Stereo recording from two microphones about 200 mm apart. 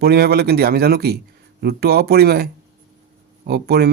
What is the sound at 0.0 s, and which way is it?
Speech, 55° right (ahead or behind).